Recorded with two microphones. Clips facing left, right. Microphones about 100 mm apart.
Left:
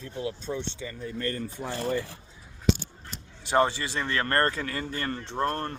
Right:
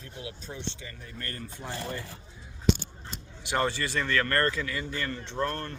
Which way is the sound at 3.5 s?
25° left (ahead or behind).